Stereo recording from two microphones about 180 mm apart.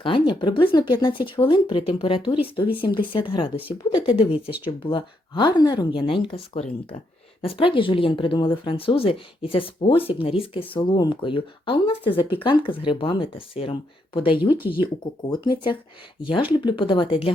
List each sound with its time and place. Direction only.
0.0 s speech: 30° left (ahead or behind)